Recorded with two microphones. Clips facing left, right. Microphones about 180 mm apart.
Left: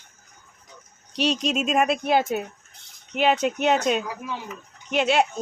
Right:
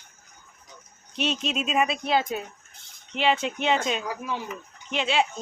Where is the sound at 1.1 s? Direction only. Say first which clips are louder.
Left 4 dB; 40° left (ahead or behind).